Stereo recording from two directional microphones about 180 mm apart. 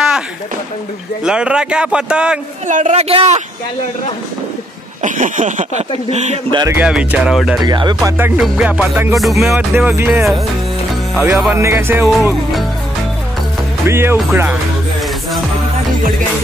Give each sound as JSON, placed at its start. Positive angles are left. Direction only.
{"t": 1.2, "sound": "a man's voice", "side_deg": -5}
{"t": 2.7, "sound": "speech", "side_deg": -40}
{"t": 5.0, "sound": "speech", "side_deg": -45}
{"t": 6.7, "sound": "a man's voice", "side_deg": -5}
{"t": 7.6, "sound": "speech", "side_deg": -25}
{"t": 8.2, "sound": "music", "side_deg": -5}
{"t": 9.1, "sound": "a man's voice", "side_deg": 0}
{"t": 11.5, "sound": "music", "side_deg": -15}
{"t": 12.0, "sound": "a man's voice", "side_deg": 0}
{"t": 13.8, "sound": "music", "side_deg": -15}